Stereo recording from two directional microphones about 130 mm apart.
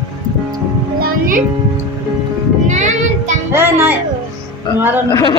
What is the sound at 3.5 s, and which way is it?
A child's voice, 20° right (ahead or behind).